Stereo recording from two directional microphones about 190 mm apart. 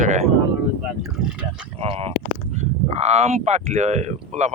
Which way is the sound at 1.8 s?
30° right (ahead or behind).